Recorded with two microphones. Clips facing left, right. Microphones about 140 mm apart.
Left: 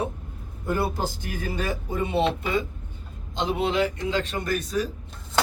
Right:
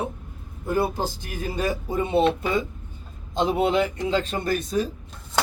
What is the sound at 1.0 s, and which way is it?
Speech, 25° right (ahead or behind).